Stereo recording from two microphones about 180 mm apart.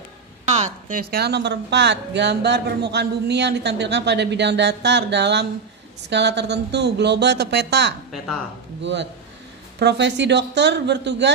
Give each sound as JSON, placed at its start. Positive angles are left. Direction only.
{"t": 0.5, "sound": "a woman's voice", "side_deg": -40}
{"t": 9.8, "sound": "a woman's voice", "side_deg": -75}